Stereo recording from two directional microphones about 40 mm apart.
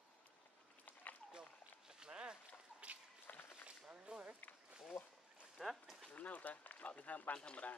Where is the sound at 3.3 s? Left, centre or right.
Left.